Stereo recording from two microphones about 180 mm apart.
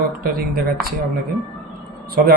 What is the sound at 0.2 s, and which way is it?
Speech, 55° right (ahead or behind).